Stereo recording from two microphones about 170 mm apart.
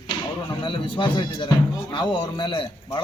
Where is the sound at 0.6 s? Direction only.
30° left (ahead or behind).